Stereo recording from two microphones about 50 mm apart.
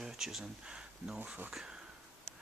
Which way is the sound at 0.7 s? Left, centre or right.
Centre.